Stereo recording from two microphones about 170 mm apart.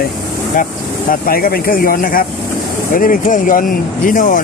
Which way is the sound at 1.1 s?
60° left (ahead or behind).